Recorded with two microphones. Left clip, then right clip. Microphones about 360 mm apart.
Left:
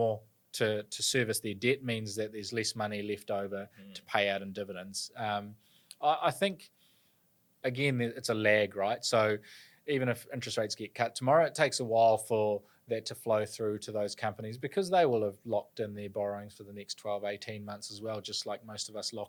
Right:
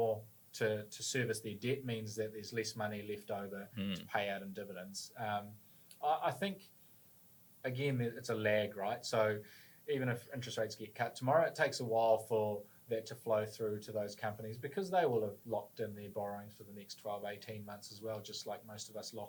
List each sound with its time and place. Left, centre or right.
0.5 s speech: left